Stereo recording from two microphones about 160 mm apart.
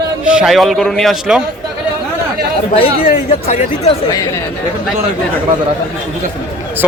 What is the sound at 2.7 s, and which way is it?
Speech, 35° left (ahead or behind).